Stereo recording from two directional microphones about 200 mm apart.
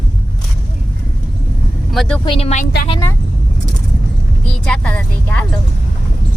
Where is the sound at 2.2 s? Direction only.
25° left (ahead or behind).